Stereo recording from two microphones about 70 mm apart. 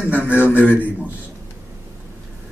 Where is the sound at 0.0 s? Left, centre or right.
Right.